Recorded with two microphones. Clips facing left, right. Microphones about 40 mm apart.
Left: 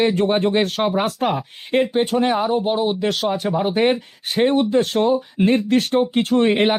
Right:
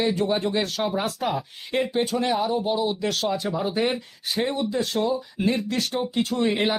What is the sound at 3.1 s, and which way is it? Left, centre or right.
Speech, left.